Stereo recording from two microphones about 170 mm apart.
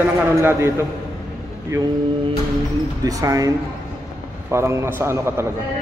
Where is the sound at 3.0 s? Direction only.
20° right (ahead or behind).